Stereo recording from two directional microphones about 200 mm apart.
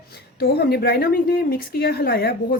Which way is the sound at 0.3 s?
55° left (ahead or behind).